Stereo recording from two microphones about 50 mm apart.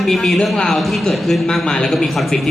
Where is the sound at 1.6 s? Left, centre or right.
Centre.